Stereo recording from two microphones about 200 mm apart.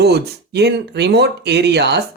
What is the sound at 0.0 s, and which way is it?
Speech, 55° right (ahead or behind).